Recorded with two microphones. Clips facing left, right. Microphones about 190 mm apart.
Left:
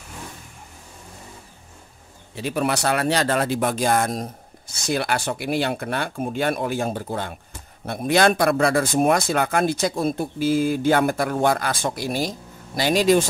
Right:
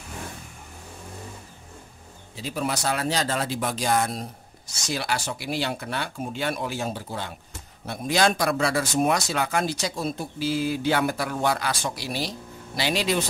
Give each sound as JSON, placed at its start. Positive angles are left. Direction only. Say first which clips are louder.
{"t": 2.3, "sound": "a man's voice", "louder": "left 5 dB", "side_deg": 65}